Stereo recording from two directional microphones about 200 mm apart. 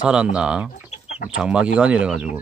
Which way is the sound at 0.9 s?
30° left (ahead or behind).